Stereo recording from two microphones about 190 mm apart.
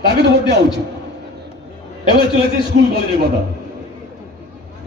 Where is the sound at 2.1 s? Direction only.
55° right (ahead or behind).